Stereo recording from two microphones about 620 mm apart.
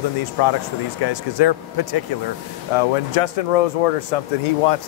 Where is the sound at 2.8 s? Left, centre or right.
Left.